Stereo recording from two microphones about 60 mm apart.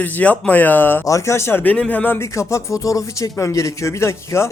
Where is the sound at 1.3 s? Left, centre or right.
Left.